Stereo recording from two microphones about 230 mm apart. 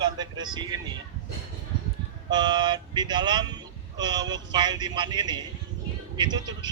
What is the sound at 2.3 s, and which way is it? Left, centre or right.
Speech, centre.